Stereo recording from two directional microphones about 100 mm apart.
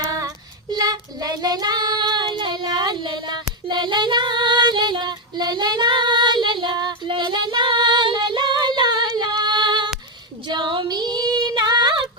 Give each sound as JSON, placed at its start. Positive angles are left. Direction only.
{"t": 0.7, "sound": "child singing", "side_deg": -40}
{"t": 2.2, "sound": "female singing", "side_deg": -55}